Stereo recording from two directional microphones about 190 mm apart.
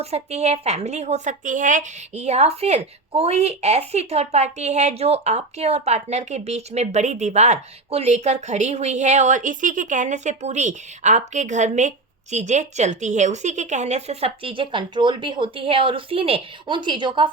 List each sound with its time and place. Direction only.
0.0 s a woman's voice: 35° right (ahead or behind)